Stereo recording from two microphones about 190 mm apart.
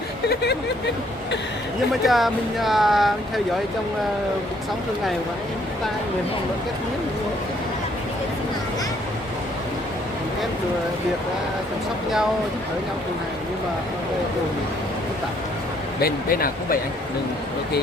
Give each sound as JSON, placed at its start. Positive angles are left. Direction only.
{"t": 2.0, "sound": "speech", "side_deg": 0}
{"t": 16.0, "sound": "speech", "side_deg": 50}